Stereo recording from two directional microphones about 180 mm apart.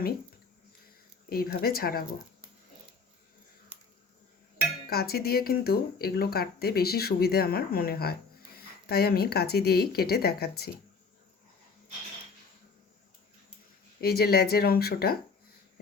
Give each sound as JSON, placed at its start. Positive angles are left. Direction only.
{"t": 1.3, "sound": "speech", "side_deg": 60}
{"t": 4.9, "sound": "speech", "side_deg": 60}
{"t": 14.0, "sound": "speech", "side_deg": 60}